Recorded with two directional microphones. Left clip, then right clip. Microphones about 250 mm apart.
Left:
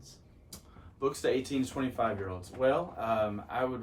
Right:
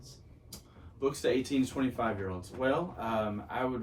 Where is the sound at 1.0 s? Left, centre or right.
Centre.